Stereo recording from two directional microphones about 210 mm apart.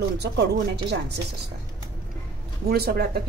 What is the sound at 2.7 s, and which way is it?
Speech, 45° right (ahead or behind).